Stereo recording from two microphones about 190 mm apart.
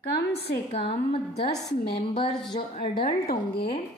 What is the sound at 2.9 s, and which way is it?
Speech, 50° left (ahead or behind).